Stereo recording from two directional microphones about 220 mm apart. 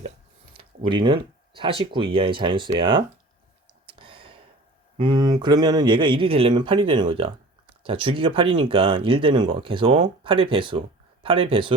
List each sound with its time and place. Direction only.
0.9 s speech: 20° right (ahead or behind)
3.8 s a sound: 25° right (ahead or behind)
4.9 s speech: 20° right (ahead or behind)